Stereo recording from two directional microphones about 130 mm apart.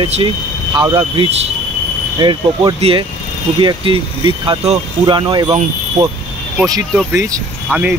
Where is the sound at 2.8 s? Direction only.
45° right (ahead or behind); by 6.0 s 30° right (ahead or behind).